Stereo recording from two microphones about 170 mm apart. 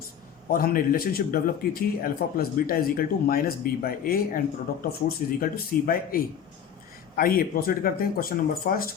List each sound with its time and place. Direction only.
0.5 s speech: 60° left (ahead or behind)